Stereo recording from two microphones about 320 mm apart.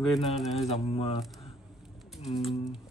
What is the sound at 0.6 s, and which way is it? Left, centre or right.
Speech, centre.